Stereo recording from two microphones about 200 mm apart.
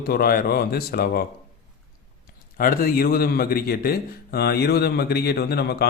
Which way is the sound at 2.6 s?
45° left (ahead or behind).